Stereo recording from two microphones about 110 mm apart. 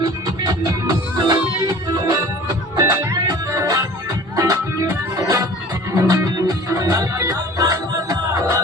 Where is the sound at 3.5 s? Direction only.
30° right (ahead or behind).